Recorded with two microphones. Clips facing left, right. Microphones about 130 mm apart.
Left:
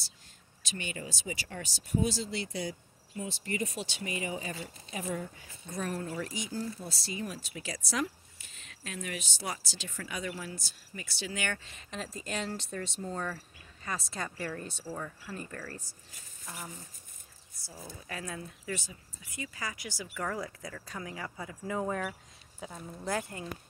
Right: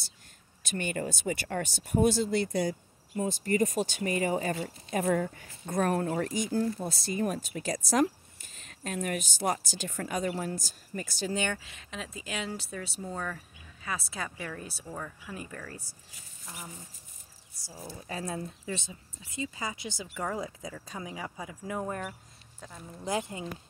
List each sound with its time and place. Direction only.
0.7 s speech: 50° right (ahead or behind)
11.5 s speech: centre (ahead or behind)
14.9 s speech: 5° left (ahead or behind)
15.3 s speech: 10° right (ahead or behind)
17.9 s speech: 25° right (ahead or behind); by 23.0 s 5° left (ahead or behind)
23.0 s speech: 20° right (ahead or behind)